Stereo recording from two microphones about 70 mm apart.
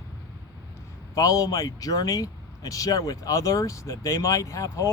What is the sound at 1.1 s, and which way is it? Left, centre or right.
Speech, left.